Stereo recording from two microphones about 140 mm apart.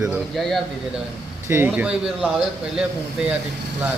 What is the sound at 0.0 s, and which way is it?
Speech, centre (ahead or behind).